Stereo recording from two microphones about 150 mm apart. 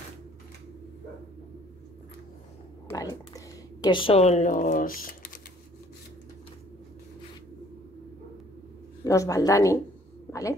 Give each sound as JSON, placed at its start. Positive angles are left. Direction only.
{"t": 2.9, "sound": "speech", "side_deg": 25}
{"t": 9.0, "sound": "speech", "side_deg": 20}